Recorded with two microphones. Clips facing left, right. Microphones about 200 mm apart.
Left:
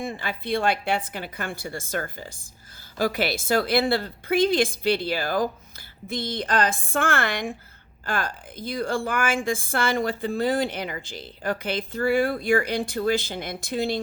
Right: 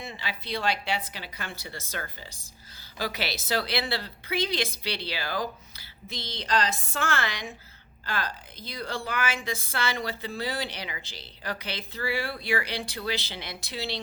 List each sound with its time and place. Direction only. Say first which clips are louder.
0.0 s a woman's voice: left 7 dB; 50° left (ahead or behind)